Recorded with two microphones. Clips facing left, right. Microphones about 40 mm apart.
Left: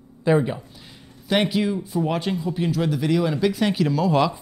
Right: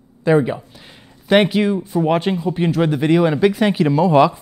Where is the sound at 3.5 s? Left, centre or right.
Centre.